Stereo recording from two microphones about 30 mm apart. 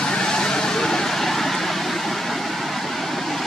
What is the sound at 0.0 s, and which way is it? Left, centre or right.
Vehicle, left.